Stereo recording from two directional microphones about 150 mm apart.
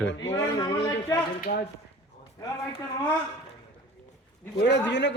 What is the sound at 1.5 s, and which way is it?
Speech, 70° left (ahead or behind).